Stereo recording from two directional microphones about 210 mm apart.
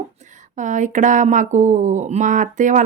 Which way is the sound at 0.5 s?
35° right (ahead or behind).